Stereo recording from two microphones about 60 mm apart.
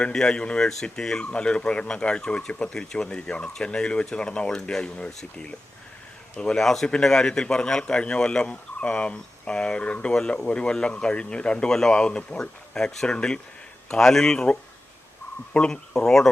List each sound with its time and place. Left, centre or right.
0.0 s a man's voice: centre